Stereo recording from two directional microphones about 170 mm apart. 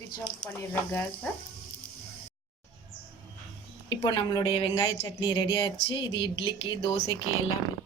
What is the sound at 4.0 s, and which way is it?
Speech, 25° left (ahead or behind).